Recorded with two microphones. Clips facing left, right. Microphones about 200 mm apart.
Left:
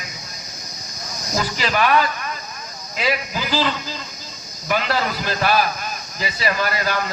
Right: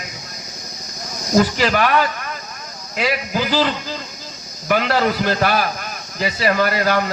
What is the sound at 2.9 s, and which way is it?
A man's voice, 60° right (ahead or behind).